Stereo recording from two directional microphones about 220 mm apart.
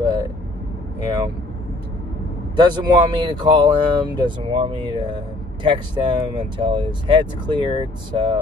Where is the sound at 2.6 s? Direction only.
20° right (ahead or behind).